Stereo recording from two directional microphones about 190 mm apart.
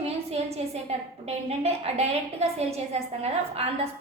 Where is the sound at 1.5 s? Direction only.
35° right (ahead or behind).